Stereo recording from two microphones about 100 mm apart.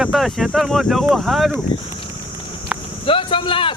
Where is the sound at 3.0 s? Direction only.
60° left (ahead or behind).